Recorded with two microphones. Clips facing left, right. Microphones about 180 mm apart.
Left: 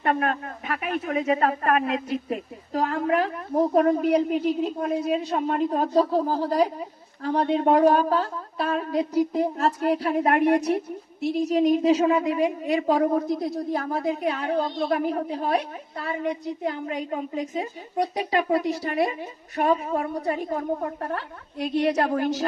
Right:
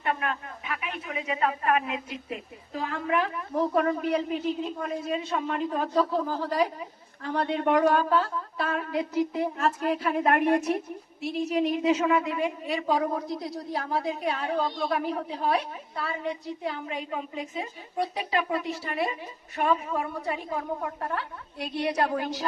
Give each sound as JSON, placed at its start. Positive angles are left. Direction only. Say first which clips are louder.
{"t": 0.0, "sound": "a woman's voice", "louder": "left 6 dB", "side_deg": 45}
{"t": 11.2, "sound": "a woman's voice", "louder": "left 5 dB", "side_deg": 40}